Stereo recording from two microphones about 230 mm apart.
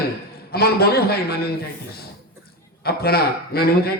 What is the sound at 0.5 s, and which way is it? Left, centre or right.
A man's voice, left.